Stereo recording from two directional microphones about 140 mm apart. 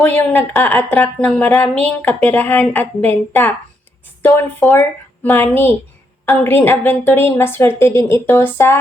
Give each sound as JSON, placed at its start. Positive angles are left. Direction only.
{"t": 0.1, "sound": "a woman's voice", "side_deg": 10}